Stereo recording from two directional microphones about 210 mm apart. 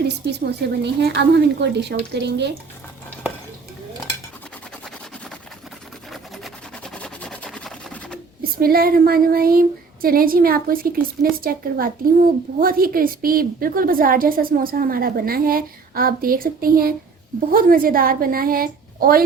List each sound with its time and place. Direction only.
0.3 s speech: 55° right (ahead or behind)
6.1 s a sound: centre (ahead or behind)
8.5 s speech: 45° right (ahead or behind)